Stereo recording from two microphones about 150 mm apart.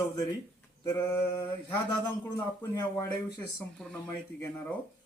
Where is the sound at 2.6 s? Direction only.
20° left (ahead or behind).